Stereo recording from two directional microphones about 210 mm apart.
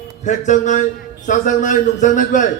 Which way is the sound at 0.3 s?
35° left (ahead or behind).